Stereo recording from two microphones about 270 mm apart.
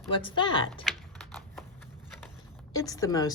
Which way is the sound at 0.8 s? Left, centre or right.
Centre.